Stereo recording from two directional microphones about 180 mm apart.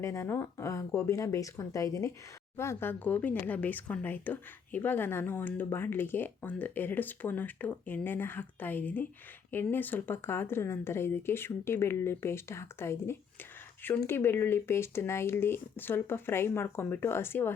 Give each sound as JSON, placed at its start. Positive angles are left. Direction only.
{"t": 0.0, "sound": "speech", "side_deg": 15}